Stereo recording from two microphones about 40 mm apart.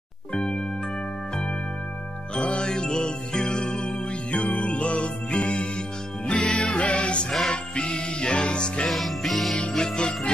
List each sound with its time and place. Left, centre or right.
0.3 s music: left
2.3 s music: left
8.8 s music: centre
9.6 s music: centre